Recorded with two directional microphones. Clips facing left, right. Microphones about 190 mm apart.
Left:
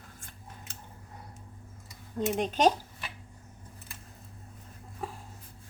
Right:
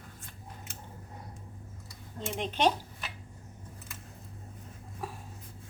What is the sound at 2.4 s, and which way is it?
Speech, 45° left (ahead or behind).